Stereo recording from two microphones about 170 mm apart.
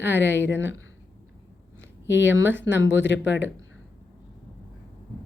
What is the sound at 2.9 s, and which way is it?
Speech, 90° left.